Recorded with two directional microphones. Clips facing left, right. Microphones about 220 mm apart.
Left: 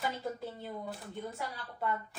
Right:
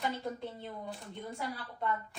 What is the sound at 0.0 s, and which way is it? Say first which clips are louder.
Speech: even; 5° left (ahead or behind).